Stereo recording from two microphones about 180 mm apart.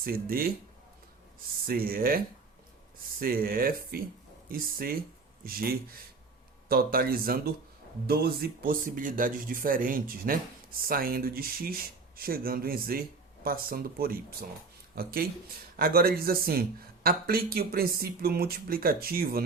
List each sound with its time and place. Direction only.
0.0 s speech: 55° right (ahead or behind)
1.6 s speech: 55° right (ahead or behind)